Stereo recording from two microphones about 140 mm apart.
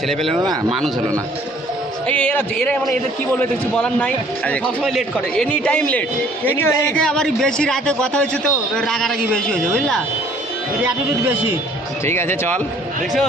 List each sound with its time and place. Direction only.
0.3 s speech: 35° right (ahead or behind)
2.0 s a man's voice: 10° left (ahead or behind)
5.5 s a man's voice: 10° left (ahead or behind)
6.9 s a man's voice: 5° left (ahead or behind)
12.0 s a man's voice: 20° left (ahead or behind)